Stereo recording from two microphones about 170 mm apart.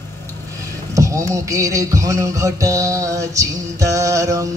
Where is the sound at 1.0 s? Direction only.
20° right (ahead or behind).